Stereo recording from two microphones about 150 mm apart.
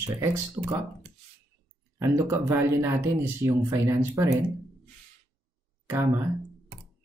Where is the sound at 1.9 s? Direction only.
20° right (ahead or behind).